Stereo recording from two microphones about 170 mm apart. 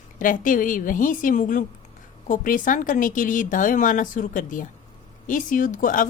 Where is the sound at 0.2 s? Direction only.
50° left (ahead or behind).